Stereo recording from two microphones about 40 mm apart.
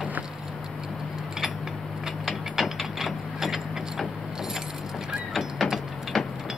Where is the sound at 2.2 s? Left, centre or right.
Centre.